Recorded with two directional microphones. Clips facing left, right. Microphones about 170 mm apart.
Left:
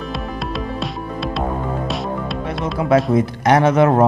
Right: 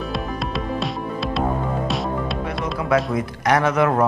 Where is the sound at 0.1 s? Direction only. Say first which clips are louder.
Even; centre (ahead or behind).